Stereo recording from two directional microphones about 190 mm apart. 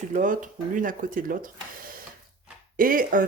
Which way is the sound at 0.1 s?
45° right (ahead or behind).